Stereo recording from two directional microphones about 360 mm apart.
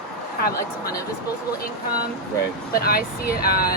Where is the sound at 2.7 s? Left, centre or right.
Left.